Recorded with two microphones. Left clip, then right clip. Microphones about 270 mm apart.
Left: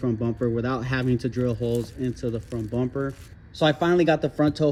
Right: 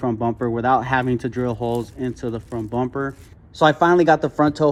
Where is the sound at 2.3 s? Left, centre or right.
Right.